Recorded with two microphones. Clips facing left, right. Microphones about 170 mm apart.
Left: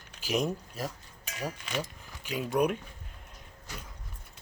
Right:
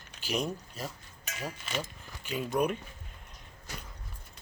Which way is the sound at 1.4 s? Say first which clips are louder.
Left 2 dB; 15° left (ahead or behind).